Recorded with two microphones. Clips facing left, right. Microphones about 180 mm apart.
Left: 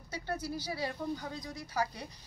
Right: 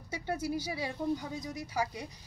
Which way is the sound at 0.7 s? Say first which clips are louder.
Right 3 dB; 20° right (ahead or behind).